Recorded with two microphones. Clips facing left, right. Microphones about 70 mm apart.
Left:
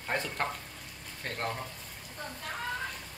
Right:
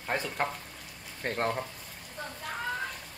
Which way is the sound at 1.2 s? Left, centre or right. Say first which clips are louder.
Right 5 dB; right.